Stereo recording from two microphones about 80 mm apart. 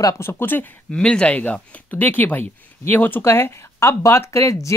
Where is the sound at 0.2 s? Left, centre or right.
Left.